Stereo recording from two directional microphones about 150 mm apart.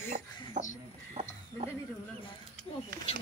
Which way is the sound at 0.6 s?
50° right (ahead or behind).